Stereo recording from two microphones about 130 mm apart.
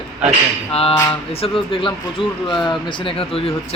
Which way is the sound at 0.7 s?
50° left (ahead or behind).